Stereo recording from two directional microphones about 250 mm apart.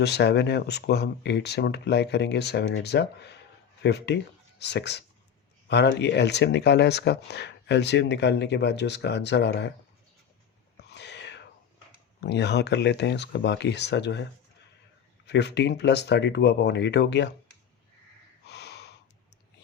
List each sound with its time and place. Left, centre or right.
0.0 s speech: left
10.8 s whispering: left
12.2 s speech: left
15.3 s speech: left
18.4 s snort: left